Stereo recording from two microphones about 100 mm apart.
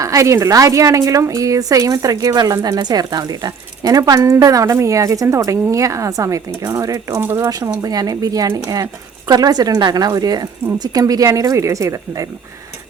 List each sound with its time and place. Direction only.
0.0 s a woman's voice: 35° right (ahead or behind)
7.2 s speech: 25° right (ahead or behind)
7.4 s a woman's voice: 40° right (ahead or behind)